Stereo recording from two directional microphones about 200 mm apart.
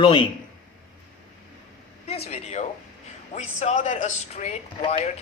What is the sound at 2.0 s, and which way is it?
A woman's voice, 30° left (ahead or behind).